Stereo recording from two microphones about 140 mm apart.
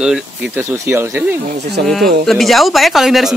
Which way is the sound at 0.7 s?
15° right (ahead or behind).